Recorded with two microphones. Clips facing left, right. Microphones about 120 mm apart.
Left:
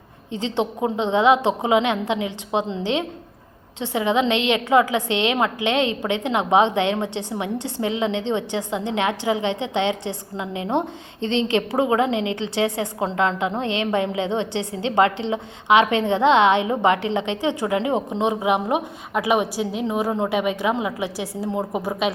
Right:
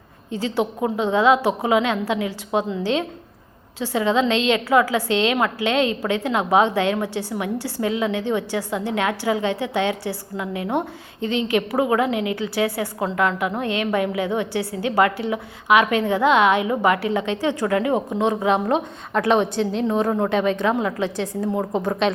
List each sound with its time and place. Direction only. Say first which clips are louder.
0.3 s a woman's voice: right 1 dB; 20° left (ahead or behind)